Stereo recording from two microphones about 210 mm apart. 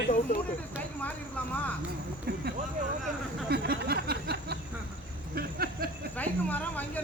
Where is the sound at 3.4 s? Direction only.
50° right (ahead or behind).